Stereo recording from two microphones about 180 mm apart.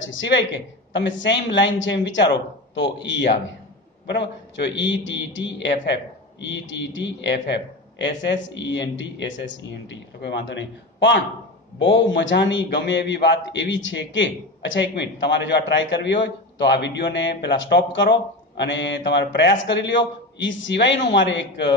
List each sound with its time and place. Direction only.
0.0 s a woman's voice: 90° left
11.8 s a man's voice: 90° left